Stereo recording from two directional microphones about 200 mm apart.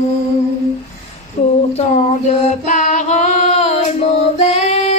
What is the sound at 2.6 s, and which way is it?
Child singing, 35° left (ahead or behind).